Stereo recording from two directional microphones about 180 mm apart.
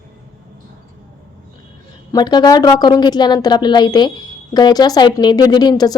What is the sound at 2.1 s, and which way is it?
Speech, 25° left (ahead or behind).